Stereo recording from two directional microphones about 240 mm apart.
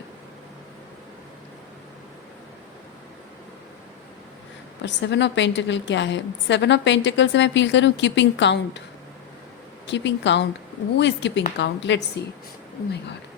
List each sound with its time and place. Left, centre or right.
4.8 s a woman's voice: left
9.8 s a woman's voice: left